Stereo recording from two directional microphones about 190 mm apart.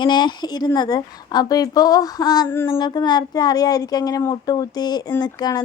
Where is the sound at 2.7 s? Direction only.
25° left (ahead or behind).